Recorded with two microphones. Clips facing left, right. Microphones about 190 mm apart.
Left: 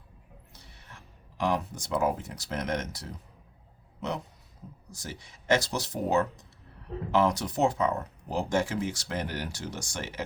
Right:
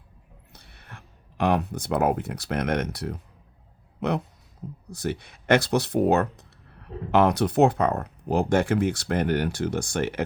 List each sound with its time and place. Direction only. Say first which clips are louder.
0.5 s speech: right 6 dB; 60° right (ahead or behind)